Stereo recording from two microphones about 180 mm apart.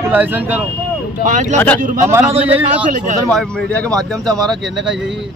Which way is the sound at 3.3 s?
5° left (ahead or behind).